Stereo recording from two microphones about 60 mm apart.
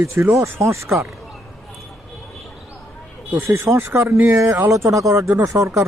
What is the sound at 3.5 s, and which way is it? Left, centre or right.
Speech, right.